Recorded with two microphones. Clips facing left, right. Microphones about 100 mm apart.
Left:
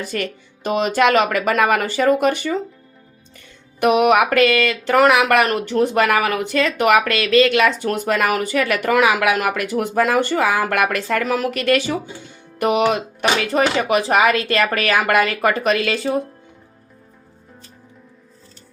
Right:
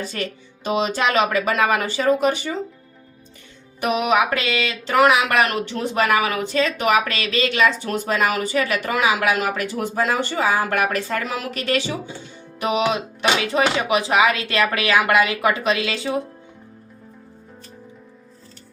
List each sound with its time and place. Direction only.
0.0 s speech: 55° left (ahead or behind)
3.8 s speech: 60° left (ahead or behind)
6.5 s speech: 65° left (ahead or behind)
12.5 s music: 50° left (ahead or behind)
13.5 s speech: 45° left (ahead or behind)